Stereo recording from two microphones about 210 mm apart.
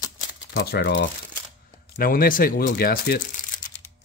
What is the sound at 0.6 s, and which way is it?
Speech, 55° left (ahead or behind).